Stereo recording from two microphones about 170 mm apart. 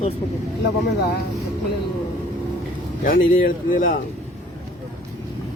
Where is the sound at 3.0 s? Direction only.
55° left (ahead or behind).